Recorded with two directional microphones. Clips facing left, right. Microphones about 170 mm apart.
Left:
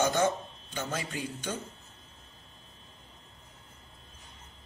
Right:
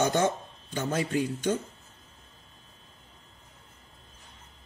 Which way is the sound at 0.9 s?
50° right (ahead or behind).